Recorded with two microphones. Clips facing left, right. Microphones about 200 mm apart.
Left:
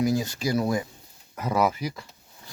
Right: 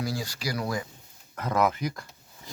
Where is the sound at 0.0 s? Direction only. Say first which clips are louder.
Left 7 dB; 20° left (ahead or behind).